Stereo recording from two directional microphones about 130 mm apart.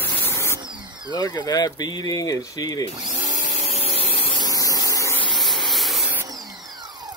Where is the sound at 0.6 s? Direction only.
35° right (ahead or behind).